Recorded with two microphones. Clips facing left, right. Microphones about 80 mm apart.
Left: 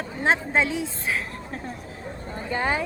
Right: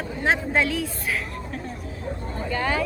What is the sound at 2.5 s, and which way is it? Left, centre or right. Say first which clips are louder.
Speech: even; left.